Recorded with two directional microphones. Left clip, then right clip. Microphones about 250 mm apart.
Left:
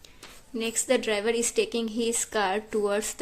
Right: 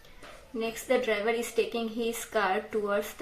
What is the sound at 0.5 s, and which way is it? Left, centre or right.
A woman's voice, left.